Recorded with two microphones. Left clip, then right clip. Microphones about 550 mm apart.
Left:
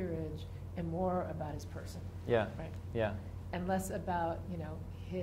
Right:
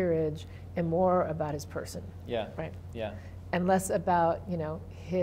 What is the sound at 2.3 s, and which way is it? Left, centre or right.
Speech, left.